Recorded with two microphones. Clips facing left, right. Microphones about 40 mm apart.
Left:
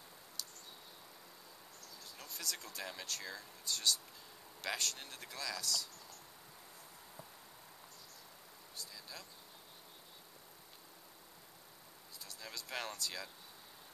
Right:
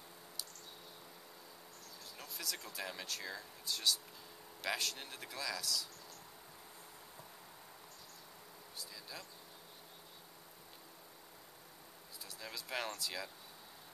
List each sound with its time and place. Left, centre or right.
2.1 s speech: centre
12.3 s speech: centre